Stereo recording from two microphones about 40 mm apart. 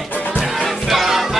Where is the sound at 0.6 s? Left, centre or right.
Centre.